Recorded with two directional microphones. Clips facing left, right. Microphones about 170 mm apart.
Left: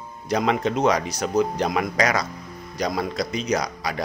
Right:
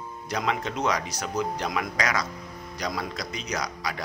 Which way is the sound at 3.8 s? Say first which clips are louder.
Left 5 dB; 25° left (ahead or behind).